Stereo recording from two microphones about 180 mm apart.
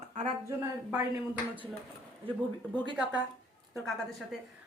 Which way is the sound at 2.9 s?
5° right (ahead or behind).